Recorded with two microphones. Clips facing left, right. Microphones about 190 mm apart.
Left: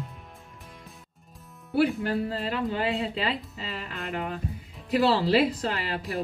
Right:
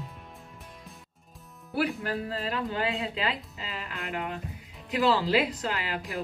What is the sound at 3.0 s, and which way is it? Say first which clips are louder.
Speech: left 2 dB; 35° left (ahead or behind).